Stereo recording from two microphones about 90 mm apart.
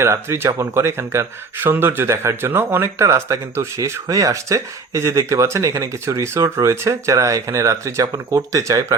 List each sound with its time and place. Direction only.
0.0 s speech: 30° right (ahead or behind)